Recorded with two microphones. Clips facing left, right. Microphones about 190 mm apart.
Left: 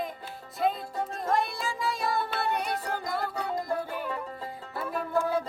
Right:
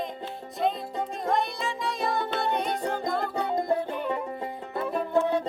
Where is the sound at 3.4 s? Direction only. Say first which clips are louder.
Right 5 dB; 25° right (ahead or behind).